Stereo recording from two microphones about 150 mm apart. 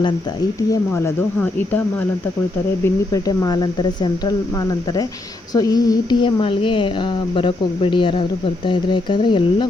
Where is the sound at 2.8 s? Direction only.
20° left (ahead or behind).